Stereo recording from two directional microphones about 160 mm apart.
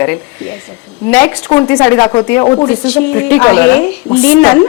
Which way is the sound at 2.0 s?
30° left (ahead or behind).